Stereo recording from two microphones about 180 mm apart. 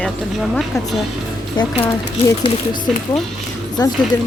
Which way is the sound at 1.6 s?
25° left (ahead or behind).